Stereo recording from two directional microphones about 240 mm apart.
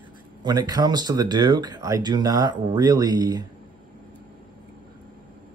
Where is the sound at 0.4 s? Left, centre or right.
Centre.